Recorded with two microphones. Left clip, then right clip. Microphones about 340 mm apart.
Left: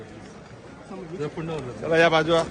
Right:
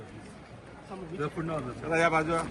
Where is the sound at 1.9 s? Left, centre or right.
Left.